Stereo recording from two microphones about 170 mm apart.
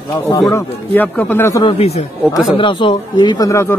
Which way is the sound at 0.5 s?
10° left (ahead or behind).